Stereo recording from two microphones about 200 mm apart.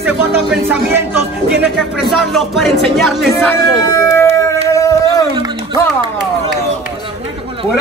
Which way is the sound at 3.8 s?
15° left (ahead or behind).